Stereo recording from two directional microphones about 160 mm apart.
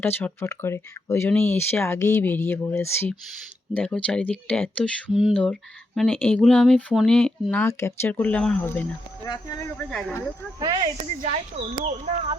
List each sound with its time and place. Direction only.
0.0 s speech: 15° left (ahead or behind)
9.9 s speech: centre (ahead or behind)
11.3 s speech: 35° right (ahead or behind)